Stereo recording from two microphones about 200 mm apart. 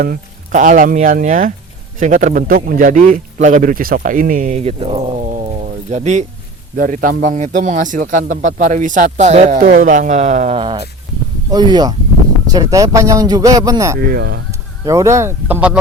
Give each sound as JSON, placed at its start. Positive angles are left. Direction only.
{"t": 0.0, "sound": "a man's voice", "side_deg": -45}
{"t": 10.6, "sound": "speech", "side_deg": -25}
{"t": 14.1, "sound": "speech", "side_deg": -50}
{"t": 14.8, "sound": "speech", "side_deg": -15}